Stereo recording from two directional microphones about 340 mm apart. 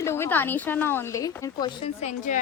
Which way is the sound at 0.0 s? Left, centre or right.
Centre.